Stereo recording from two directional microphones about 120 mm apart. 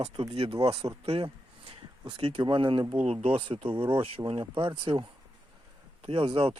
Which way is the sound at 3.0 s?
55° right (ahead or behind).